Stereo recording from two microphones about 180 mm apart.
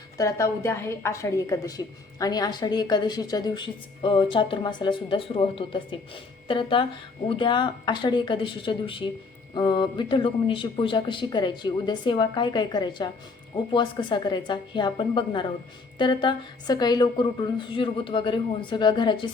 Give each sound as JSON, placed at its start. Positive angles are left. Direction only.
{"t": 0.2, "sound": "a woman's voice", "side_deg": 15}